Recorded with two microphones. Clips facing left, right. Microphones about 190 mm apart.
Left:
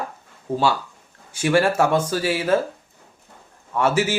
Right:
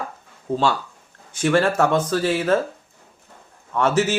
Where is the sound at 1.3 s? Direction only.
10° left (ahead or behind).